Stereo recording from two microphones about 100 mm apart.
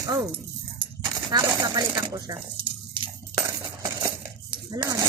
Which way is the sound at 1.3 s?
45° right (ahead or behind).